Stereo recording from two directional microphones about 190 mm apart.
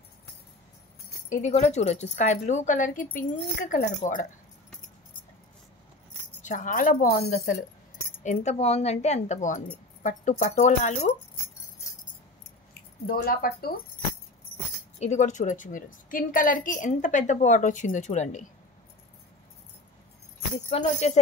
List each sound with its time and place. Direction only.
1.3 s a woman's voice: 40° left (ahead or behind)
6.4 s a woman's voice: 45° left (ahead or behind)
13.0 s speech: 55° left (ahead or behind)
15.0 s a woman's voice: 40° left (ahead or behind)
20.7 s a woman's voice: 35° left (ahead or behind)